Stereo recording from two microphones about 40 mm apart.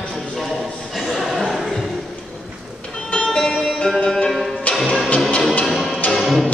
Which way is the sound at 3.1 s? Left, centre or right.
Centre.